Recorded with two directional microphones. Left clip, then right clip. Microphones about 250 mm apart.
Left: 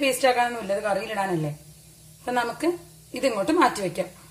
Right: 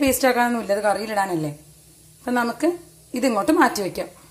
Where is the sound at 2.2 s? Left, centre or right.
Centre.